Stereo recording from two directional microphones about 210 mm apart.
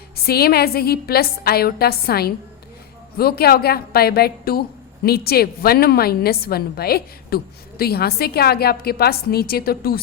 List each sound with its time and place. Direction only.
0.2 s a woman's voice: 50° left (ahead or behind)